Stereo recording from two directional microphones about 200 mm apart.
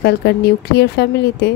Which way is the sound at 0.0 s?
55° left (ahead or behind).